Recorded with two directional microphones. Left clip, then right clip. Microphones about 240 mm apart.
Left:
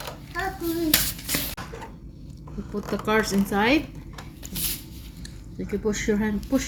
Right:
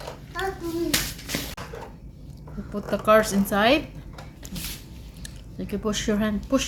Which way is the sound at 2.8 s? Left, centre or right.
Centre.